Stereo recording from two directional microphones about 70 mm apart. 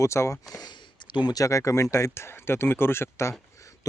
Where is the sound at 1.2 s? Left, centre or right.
Left.